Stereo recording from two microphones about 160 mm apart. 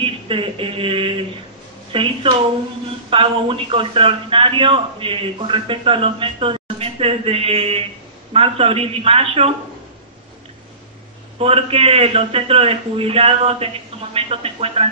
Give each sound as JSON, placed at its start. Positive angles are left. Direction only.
{"t": 0.0, "sound": "a man's voice", "side_deg": -35}
{"t": 11.3, "sound": "a man's voice", "side_deg": -40}